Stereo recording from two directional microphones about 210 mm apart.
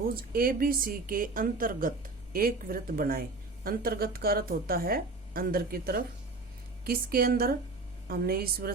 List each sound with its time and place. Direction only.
0.1 s a woman's voice: 45° right (ahead or behind)